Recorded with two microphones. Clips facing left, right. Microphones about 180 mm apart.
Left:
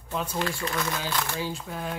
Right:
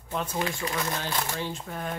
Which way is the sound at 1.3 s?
5° left (ahead or behind).